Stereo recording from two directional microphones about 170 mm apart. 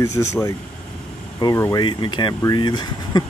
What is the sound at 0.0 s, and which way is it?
Speech, 15° left (ahead or behind).